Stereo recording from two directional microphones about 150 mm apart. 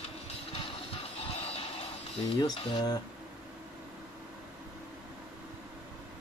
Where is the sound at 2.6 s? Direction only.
30° left (ahead or behind).